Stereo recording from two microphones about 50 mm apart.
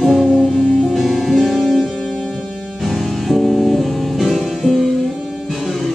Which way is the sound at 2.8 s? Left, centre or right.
Centre.